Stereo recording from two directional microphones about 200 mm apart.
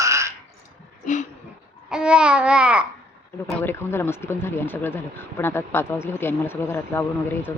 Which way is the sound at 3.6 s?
10° left (ahead or behind).